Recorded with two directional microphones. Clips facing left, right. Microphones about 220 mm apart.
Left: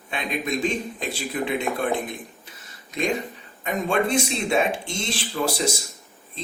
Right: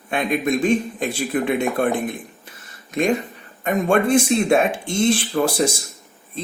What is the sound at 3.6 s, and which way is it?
Speech, 50° right (ahead or behind).